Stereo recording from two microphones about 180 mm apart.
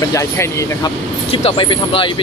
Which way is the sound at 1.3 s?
30° left (ahead or behind).